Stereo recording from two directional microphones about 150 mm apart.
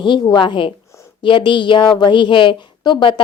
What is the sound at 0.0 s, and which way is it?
A woman's voice, 30° left (ahead or behind).